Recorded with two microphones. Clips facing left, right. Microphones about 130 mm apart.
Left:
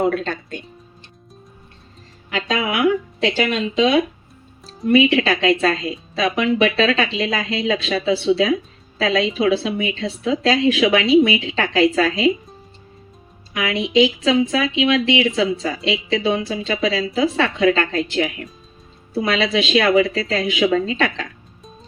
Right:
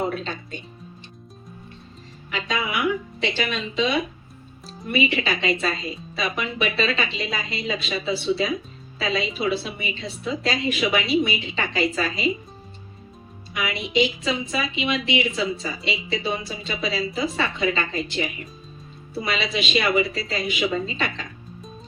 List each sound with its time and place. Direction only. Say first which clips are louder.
0.0 s speech: left 7 dB; 60° left (ahead or behind)
2.3 s a woman's voice: left 5 dB; 90° left
13.6 s a woman's voice: left 6 dB; 90° left